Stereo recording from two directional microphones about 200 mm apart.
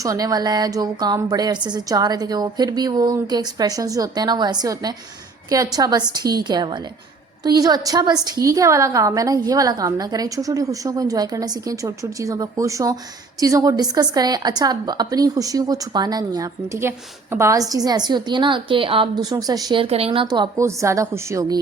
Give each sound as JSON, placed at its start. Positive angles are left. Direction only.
{"t": 0.0, "sound": "a woman's voice", "side_deg": -20}